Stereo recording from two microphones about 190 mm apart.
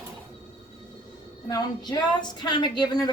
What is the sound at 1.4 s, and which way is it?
A woman's voice, 20° left (ahead or behind).